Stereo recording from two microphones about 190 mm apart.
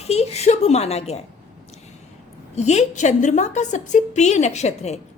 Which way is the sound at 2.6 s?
35° left (ahead or behind).